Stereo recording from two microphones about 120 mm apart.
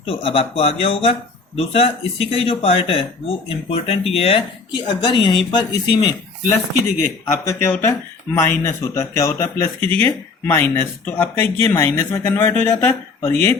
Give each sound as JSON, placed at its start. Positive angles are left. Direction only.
{"t": 0.0, "sound": "speech", "side_deg": 50}
{"t": 4.7, "sound": "speech", "side_deg": 40}
{"t": 7.3, "sound": "a man's voice", "side_deg": 20}